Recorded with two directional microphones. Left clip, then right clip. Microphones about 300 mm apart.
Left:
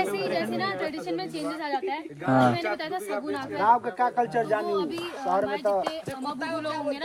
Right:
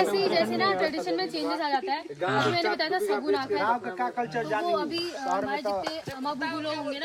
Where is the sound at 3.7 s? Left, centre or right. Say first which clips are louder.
Left 6 dB; left.